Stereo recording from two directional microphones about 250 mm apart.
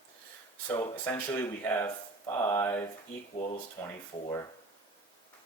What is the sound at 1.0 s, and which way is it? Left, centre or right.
Speech, centre.